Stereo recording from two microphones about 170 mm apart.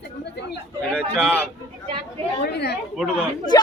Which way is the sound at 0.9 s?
Centre (ahead or behind).